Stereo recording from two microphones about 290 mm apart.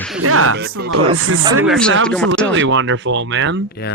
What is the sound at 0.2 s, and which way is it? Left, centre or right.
Speech, right.